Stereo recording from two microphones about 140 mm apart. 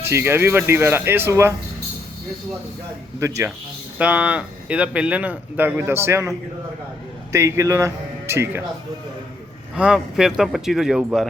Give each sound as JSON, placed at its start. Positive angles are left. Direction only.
{"t": 0.0, "sound": "speech", "side_deg": -15}
{"t": 3.2, "sound": "a man's voice", "side_deg": -20}
{"t": 3.9, "sound": "speech", "side_deg": -10}
{"t": 7.3, "sound": "a man's voice", "side_deg": -20}
{"t": 9.7, "sound": "a man's voice", "side_deg": -5}